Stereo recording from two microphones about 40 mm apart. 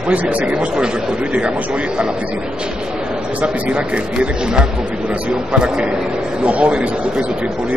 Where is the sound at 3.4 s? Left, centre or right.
Right.